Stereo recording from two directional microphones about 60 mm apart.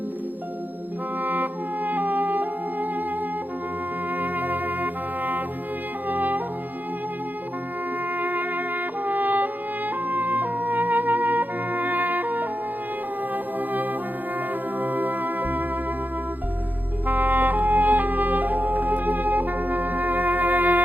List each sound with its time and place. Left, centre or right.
1.2 s music: right
4.2 s trumpet: right
6.1 s brass instrument: right
8.2 s music: right
10.1 s trumpet: right
13.3 s brass instrument: right
14.8 s music: right
17.1 s music: right